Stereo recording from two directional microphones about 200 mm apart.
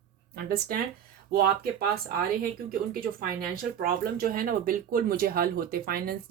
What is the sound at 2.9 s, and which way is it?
Speech, 45° right (ahead or behind).